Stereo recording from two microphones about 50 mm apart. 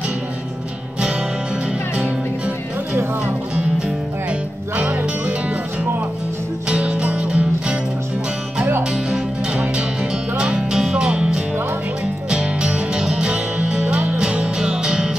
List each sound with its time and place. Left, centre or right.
6.8 s music: right
10.3 s music: centre